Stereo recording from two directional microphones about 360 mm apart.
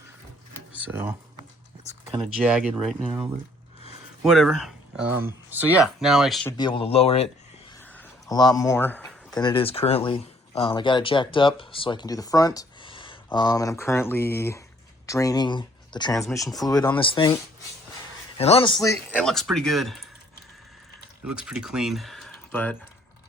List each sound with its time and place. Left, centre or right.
0.7 s speech: centre
2.4 s speech: centre
4.2 s speech: centre
6.6 s speech: centre
16.2 s speech: centre
18.3 s speech: centre
21.2 s speech: centre